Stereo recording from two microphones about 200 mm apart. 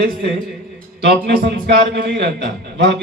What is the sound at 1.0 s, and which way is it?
A man's voice, 55° right (ahead or behind).